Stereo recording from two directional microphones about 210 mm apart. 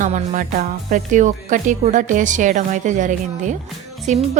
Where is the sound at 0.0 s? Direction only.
40° right (ahead or behind).